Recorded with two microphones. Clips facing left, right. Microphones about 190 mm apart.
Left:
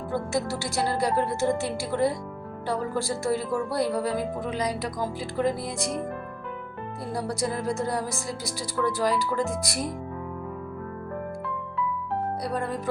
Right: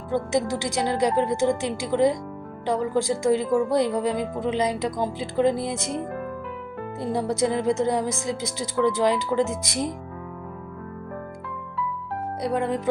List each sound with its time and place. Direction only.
0.1 s a woman's voice: 20° right (ahead or behind)
7.0 s speech: 25° right (ahead or behind)
12.4 s speech: 20° right (ahead or behind)